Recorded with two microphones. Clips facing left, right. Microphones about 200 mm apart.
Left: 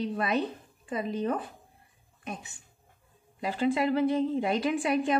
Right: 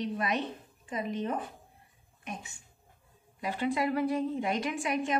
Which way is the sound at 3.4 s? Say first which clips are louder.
Left 3 dB; 30° left (ahead or behind).